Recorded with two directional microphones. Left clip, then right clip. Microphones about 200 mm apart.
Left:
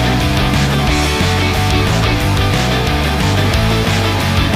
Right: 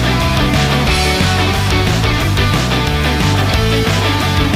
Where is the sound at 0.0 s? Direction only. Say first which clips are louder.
Right 1 dB; centre (ahead or behind).